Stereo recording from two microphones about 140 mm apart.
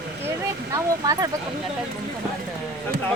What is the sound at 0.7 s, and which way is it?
Speech, 25° right (ahead or behind).